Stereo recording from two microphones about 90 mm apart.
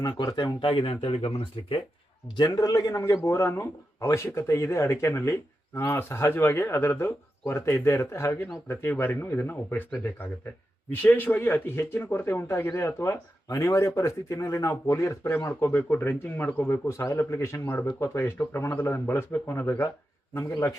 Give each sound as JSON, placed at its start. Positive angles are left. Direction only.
{"t": 0.0, "sound": "speech", "side_deg": 45}
{"t": 0.3, "sound": "speech", "side_deg": 65}
{"t": 1.6, "sound": "speech", "side_deg": 75}
{"t": 2.3, "sound": "a man's voice", "side_deg": 45}
{"t": 10.9, "sound": "a man's voice", "side_deg": 20}